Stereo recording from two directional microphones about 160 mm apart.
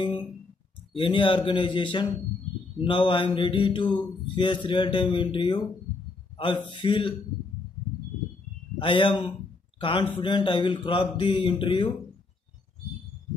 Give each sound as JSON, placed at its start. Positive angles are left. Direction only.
{"t": 0.9, "sound": "mantra", "side_deg": 30}
{"t": 8.7, "sound": "a man's voice", "side_deg": 30}
{"t": 10.2, "sound": "mantra", "side_deg": 30}